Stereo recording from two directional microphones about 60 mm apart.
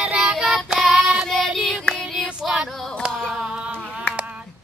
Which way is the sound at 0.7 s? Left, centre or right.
Centre.